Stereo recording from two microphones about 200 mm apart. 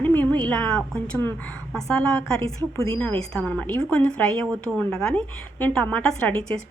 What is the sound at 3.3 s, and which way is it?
A woman's voice, 5° left (ahead or behind).